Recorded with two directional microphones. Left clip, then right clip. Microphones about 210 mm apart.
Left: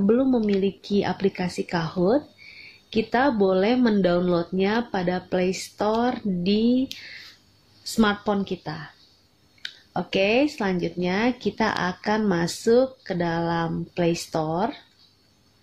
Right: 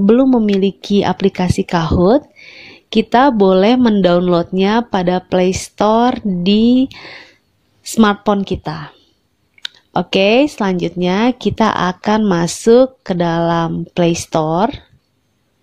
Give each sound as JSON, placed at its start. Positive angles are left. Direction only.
{"t": 0.0, "sound": "speech", "side_deg": -40}